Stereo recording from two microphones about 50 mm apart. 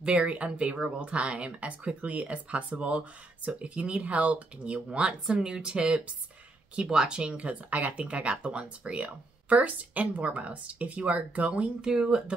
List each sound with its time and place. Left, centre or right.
0.0 s speech: right
11.8 s speech: centre